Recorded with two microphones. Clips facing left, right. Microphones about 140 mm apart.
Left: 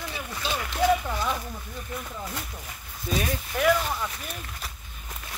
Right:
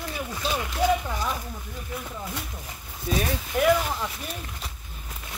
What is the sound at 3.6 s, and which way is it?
Speech, 15° right (ahead or behind).